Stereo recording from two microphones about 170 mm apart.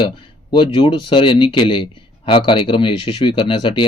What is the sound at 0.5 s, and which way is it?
Speech, 30° left (ahead or behind).